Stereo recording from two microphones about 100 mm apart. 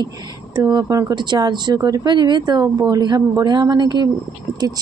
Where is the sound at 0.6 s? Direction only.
40° right (ahead or behind).